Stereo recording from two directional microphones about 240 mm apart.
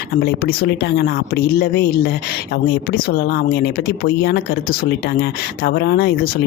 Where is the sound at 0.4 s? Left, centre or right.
Left.